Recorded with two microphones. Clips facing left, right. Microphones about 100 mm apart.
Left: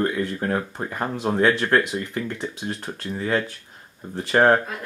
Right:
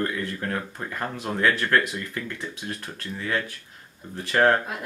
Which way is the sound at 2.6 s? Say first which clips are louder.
Left 4 dB; 30° left (ahead or behind).